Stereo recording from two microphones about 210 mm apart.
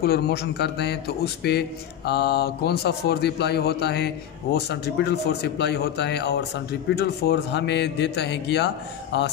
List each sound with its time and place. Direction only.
0.0 s speech: 50° left (ahead or behind)